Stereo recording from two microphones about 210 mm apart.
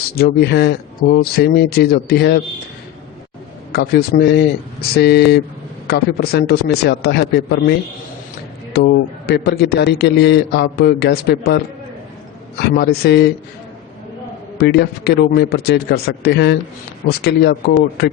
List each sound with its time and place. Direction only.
0.2 s a man's voice: 50° left (ahead or behind)
3.7 s a man's voice: 50° left (ahead or behind)
14.6 s a man's voice: 50° left (ahead or behind)